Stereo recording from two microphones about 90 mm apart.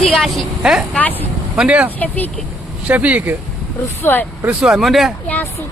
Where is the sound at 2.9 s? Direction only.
15° right (ahead or behind).